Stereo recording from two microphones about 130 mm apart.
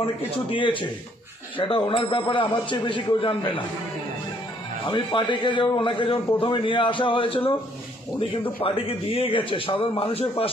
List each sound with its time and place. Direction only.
0.0 s a man's voice: 40° left (ahead or behind)
4.8 s a man's voice: 40° left (ahead or behind)
8.6 s a man's voice: 45° left (ahead or behind)